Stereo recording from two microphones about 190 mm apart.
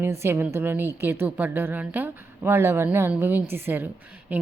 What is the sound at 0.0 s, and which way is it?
A woman's voice, 15° right (ahead or behind).